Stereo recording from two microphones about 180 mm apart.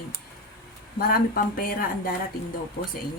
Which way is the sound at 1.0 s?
55° left (ahead or behind).